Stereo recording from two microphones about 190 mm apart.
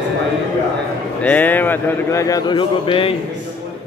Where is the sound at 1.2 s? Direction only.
10° left (ahead or behind); by 3.1 s 25° left (ahead or behind).